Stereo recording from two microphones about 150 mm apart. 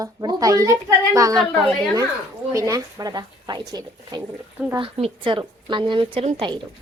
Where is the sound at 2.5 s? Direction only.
20° right (ahead or behind).